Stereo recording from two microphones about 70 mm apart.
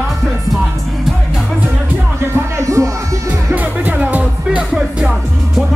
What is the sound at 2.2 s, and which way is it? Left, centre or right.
Music, right.